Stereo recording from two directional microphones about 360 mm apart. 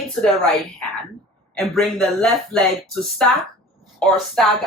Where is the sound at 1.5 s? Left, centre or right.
Centre.